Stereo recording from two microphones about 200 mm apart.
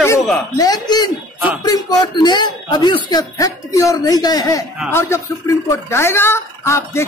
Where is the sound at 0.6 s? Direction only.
20° left (ahead or behind).